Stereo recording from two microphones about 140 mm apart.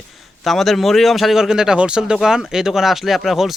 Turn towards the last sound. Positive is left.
turn(degrees=0)  # may be behind; listen again after turning